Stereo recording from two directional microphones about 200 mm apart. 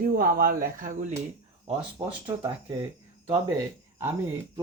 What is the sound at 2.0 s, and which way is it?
Speech, 15° right (ahead or behind).